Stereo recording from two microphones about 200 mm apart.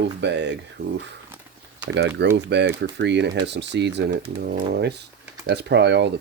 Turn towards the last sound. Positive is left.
turn(degrees=-60)  # may be behind; listen again after turning